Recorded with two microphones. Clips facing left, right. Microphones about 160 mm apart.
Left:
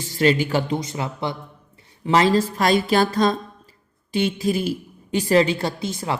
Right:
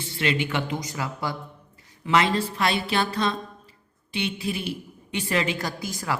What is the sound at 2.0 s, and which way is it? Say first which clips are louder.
A woman's voice: left 5 dB; 35° left (ahead or behind).